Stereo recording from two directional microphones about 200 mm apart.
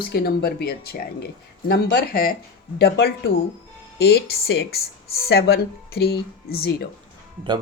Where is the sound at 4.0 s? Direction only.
55° left (ahead or behind).